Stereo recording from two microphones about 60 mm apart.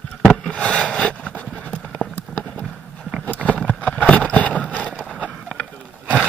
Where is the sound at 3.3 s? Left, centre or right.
Left.